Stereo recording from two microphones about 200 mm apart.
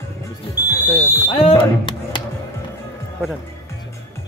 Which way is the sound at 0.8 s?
10° right (ahead or behind).